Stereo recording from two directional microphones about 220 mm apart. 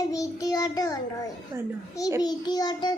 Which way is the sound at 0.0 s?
15° left (ahead or behind).